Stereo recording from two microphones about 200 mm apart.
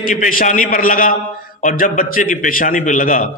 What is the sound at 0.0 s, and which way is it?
A man's voice, 40° left (ahead or behind).